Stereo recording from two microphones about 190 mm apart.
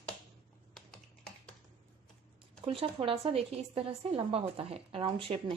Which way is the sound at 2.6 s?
30° right (ahead or behind).